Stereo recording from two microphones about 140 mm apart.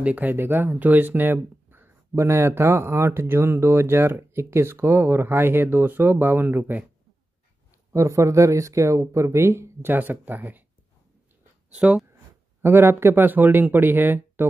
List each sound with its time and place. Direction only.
0.0 s speech: 10° right (ahead or behind)
7.9 s speech: 20° right (ahead or behind)
11.7 s speech: 5° right (ahead or behind)